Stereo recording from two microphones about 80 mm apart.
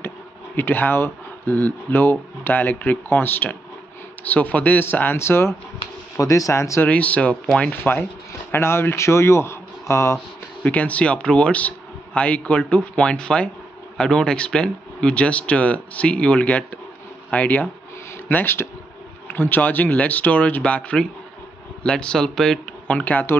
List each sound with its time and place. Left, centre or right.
0.6 s speech: left
6.1 s speech: left
6.8 s speech: centre
7.7 s a man's voice: left
10.6 s speech: centre
18.3 s speech: left